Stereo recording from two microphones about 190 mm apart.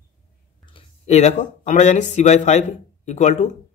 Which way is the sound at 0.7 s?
35° left (ahead or behind).